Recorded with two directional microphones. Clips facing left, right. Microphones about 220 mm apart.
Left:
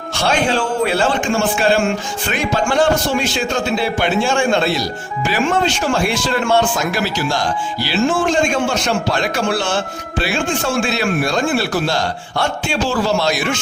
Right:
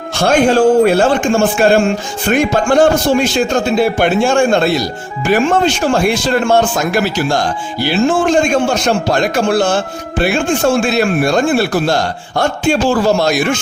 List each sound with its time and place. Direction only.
0.2 s speech: 45° right (ahead or behind)
8.5 s speech: 45° right (ahead or behind)